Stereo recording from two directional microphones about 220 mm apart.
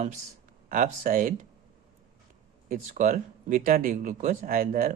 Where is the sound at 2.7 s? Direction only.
35° right (ahead or behind).